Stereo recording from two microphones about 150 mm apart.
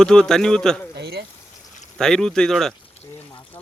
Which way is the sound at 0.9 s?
90° right.